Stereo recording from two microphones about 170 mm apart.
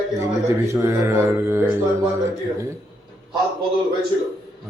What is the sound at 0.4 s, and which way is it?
A man's voice, 15° right (ahead or behind).